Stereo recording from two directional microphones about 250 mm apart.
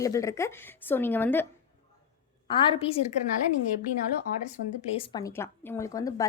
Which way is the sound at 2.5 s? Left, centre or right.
Centre.